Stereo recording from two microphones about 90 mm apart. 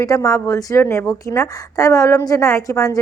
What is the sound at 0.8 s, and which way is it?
Speech, 25° left (ahead or behind).